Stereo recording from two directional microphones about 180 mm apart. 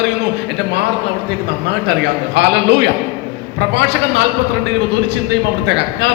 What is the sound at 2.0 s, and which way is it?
A man's voice, 70° right (ahead or behind).